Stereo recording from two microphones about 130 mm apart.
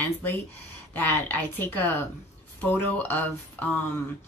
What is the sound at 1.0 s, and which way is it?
Speech, 15° left (ahead or behind).